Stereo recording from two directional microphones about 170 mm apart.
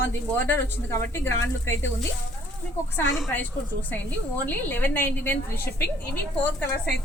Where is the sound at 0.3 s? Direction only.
15° left (ahead or behind).